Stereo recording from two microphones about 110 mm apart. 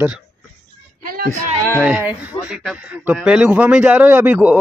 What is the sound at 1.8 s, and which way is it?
Speech, 15° right (ahead or behind).